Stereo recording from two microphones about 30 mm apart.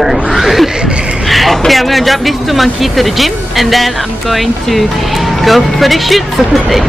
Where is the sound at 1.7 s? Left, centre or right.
Centre.